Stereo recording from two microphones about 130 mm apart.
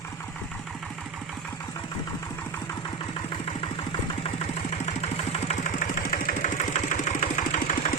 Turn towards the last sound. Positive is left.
turn(degrees=65)  # may be behind; listen again after turning